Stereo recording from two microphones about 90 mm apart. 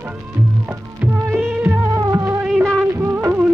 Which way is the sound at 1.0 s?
15° right (ahead or behind).